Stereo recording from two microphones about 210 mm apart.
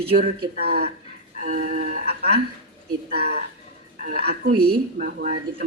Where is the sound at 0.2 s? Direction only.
45° right (ahead or behind).